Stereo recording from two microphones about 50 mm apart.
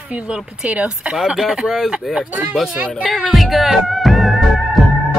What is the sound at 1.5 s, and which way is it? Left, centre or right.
Speech, centre.